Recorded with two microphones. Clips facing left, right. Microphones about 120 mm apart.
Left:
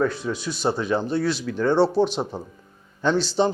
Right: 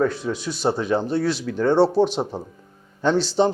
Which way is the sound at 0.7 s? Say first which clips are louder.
Right 2 dB; 40° right (ahead or behind).